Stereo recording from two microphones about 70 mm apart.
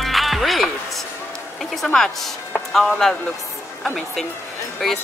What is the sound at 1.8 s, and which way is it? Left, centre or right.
A woman's voice, centre.